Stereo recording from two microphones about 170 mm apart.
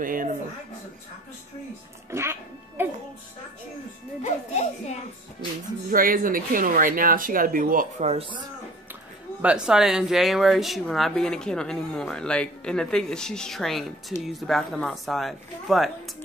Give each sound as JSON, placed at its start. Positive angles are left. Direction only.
{"t": 0.0, "sound": "speech", "side_deg": -55}
{"t": 2.0, "sound": "speech", "side_deg": -15}
{"t": 4.2, "sound": "a child's voice", "side_deg": 45}
{"t": 5.9, "sound": "speech", "side_deg": -55}
{"t": 9.4, "sound": "speech", "side_deg": -5}